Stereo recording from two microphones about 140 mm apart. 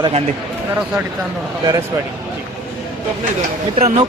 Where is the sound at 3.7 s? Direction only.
45° right (ahead or behind).